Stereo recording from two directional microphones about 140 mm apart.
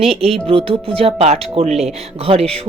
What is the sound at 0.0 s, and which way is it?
A woman's voice, 45° right (ahead or behind).